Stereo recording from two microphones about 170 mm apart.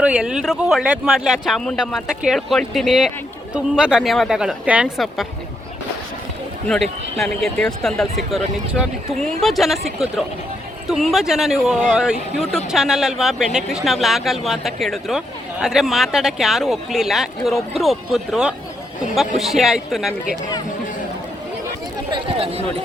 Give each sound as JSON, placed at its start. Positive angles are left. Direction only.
{"t": 0.0, "sound": "speech", "side_deg": -5}
{"t": 7.2, "sound": "speech", "side_deg": 5}
{"t": 22.1, "sound": "chatter", "side_deg": -35}